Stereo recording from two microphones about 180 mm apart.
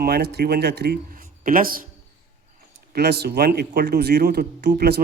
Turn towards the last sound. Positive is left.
turn(degrees=-60)  # may be behind; listen again after turning